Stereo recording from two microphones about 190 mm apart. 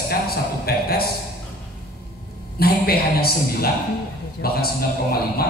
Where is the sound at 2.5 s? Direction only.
55° left (ahead or behind).